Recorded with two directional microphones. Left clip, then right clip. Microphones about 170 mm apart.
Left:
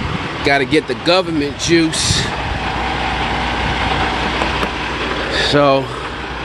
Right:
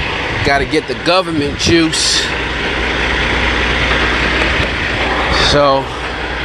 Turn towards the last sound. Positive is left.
turn(degrees=40)  # may be behind; listen again after turning